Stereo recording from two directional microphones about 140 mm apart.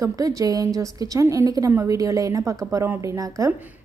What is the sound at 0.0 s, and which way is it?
A woman's voice, 25° right (ahead or behind).